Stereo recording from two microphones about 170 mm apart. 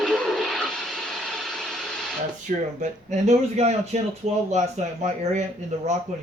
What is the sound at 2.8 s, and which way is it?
Speech, 40° right (ahead or behind).